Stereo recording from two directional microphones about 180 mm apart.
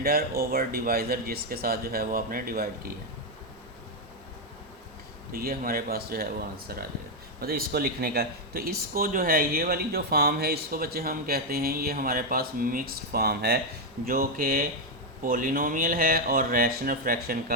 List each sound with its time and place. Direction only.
0.0 s speech: 60° right (ahead or behind)
5.3 s speech: 55° right (ahead or behind)